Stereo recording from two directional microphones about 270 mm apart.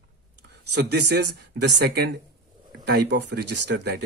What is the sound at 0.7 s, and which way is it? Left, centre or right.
Speech, right.